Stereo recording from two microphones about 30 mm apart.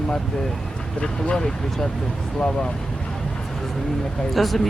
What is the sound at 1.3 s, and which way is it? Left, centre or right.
Speech, centre.